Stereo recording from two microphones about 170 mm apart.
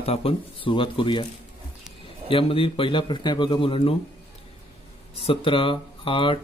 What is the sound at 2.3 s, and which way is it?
Speech, 30° left (ahead or behind).